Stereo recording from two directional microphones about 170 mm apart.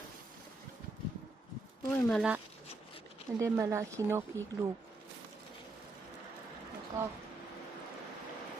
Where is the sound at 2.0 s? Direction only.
Centre (ahead or behind).